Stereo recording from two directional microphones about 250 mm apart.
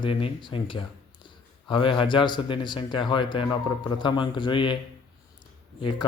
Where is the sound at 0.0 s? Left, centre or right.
Left.